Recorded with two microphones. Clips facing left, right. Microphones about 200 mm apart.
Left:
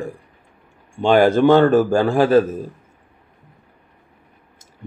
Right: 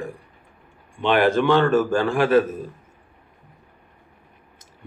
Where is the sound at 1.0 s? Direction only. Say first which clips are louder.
Left 5 dB; 40° left (ahead or behind).